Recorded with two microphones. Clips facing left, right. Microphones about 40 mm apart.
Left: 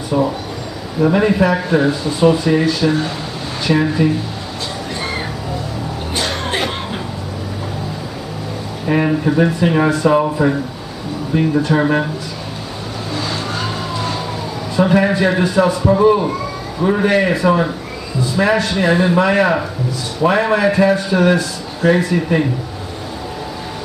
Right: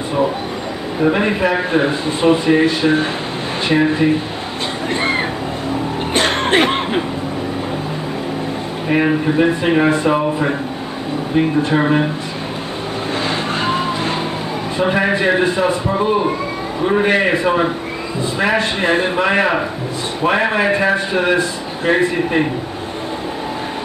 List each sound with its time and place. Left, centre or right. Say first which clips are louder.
1.1 s a man's voice: left 2 dB; right
6.1 s music: right 6 dB; right
8.9 s speech: even; centre
9.5 s a man's voice: right 1 dB; right
11.3 s a man's voice: even; right
13.1 s vehicle: right 2 dB; right
14.8 s a man's voice: left 3 dB; right
16.8 s a man's voice: left 1 dB; right